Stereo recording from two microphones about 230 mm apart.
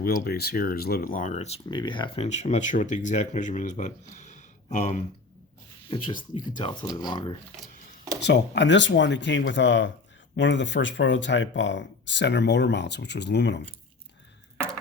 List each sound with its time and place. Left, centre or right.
0.0 s speech: left
8.2 s speech: left